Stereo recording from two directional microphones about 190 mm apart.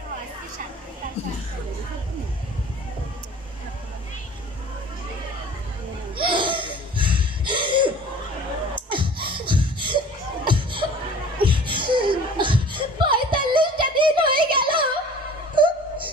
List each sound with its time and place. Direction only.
6.2 s laughter: 25° right (ahead or behind)
8.7 s beatboxing: 25° right (ahead or behind)
11.4 s chuckle: 25° right (ahead or behind)
15.5 s wail: 25° right (ahead or behind)